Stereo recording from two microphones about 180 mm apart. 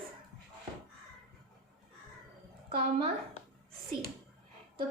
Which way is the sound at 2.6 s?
30° right (ahead or behind).